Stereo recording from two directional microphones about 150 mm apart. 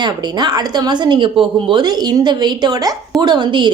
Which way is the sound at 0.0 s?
30° right (ahead or behind).